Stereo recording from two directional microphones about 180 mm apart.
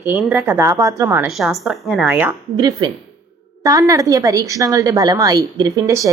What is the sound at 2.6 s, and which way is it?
A woman's voice, 20° right (ahead or behind).